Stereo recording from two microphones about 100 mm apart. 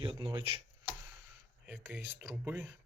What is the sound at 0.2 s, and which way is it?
Speech, 45° right (ahead or behind).